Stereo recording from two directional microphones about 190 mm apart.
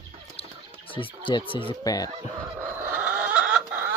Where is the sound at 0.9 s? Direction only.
25° left (ahead or behind).